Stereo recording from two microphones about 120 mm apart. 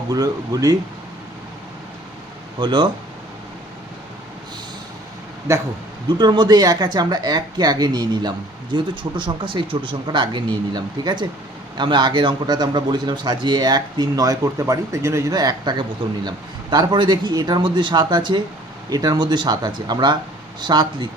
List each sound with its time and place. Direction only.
0.1 s speech: 30° right (ahead or behind)
2.6 s speech: 40° right (ahead or behind)
6.1 s speech: 35° right (ahead or behind)
15.3 s speech: 35° right (ahead or behind)